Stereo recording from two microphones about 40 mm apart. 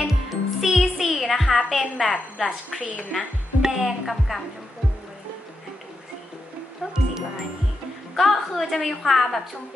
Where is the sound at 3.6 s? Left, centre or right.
Centre.